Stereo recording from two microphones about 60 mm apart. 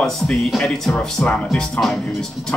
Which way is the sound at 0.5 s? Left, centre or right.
Centre.